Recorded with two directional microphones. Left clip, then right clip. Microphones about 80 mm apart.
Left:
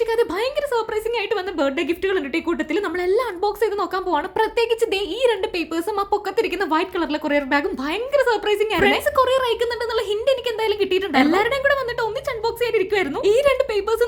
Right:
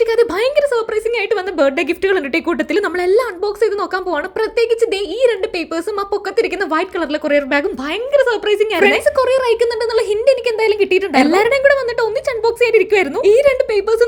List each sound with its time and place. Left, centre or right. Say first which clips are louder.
0.0 s a sound: right 6 dB; right
0.7 s a woman's voice: right 5 dB; right
4.4 s speech: right 6 dB; centre; by 13.1 s right
13.2 s speech: right 5 dB; right